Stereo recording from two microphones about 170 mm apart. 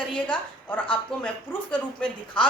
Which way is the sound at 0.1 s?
5° left (ahead or behind).